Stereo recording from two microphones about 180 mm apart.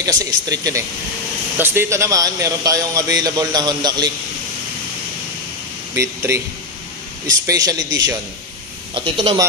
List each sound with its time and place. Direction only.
0.0 s speech: 20° right (ahead or behind)
5.9 s speech: 15° right (ahead or behind)
8.9 s speech: 30° right (ahead or behind)